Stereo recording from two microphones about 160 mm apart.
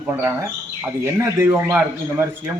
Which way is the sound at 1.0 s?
15° right (ahead or behind).